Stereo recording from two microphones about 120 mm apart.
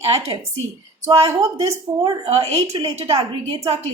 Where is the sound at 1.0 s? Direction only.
25° right (ahead or behind).